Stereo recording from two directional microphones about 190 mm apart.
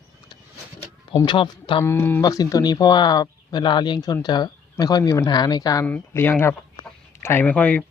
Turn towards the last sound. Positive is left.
turn(degrees=5)  # may be behind; listen again after turning